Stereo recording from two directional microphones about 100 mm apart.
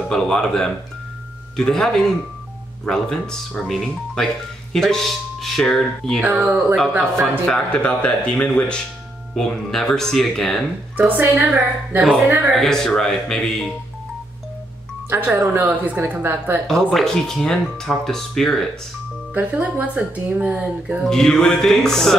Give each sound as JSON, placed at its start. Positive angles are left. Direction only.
{"t": 0.1, "sound": "speech", "side_deg": 5}
{"t": 6.9, "sound": "speech", "side_deg": -20}
{"t": 7.4, "sound": "speech", "side_deg": 10}
{"t": 11.0, "sound": "speech", "side_deg": -20}
{"t": 12.4, "sound": "speech", "side_deg": 5}
{"t": 15.0, "sound": "speech", "side_deg": -20}
{"t": 16.6, "sound": "speech", "side_deg": 5}
{"t": 19.3, "sound": "speech", "side_deg": -15}
{"t": 21.0, "sound": "speech", "side_deg": 5}